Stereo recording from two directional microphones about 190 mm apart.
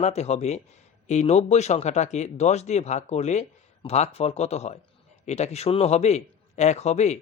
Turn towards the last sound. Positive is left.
turn(degrees=35)  # may be behind; listen again after turning